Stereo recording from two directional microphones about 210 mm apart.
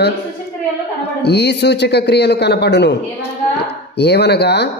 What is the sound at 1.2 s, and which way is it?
Speech, 55° left (ahead or behind).